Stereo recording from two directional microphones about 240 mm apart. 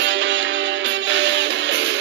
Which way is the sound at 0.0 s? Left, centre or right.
Right.